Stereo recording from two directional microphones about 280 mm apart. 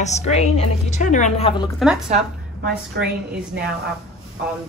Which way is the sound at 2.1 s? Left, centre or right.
Right.